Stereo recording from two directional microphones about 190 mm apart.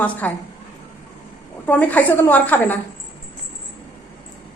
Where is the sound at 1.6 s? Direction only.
10° left (ahead or behind).